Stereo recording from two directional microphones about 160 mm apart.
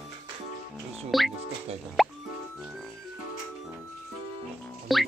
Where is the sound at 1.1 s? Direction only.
Centre (ahead or behind).